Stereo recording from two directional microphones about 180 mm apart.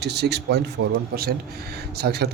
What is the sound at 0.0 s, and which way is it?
A man's voice, 65° right (ahead or behind).